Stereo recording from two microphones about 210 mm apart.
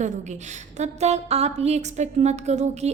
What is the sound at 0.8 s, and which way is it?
A woman's voice, 30° right (ahead or behind).